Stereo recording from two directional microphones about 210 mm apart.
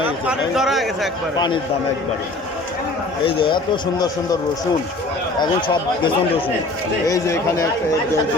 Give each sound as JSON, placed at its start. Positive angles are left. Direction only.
{"t": 0.3, "sound": "a man's voice", "side_deg": 0}
{"t": 3.2, "sound": "speech", "side_deg": 25}
{"t": 5.4, "sound": "speech", "side_deg": 20}